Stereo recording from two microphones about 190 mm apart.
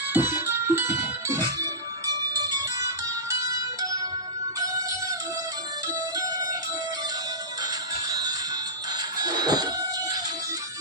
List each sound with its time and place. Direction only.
0.1 s music: 10° right (ahead or behind)
6.1 s music: 20° right (ahead or behind)
8.1 s music: 20° right (ahead or behind)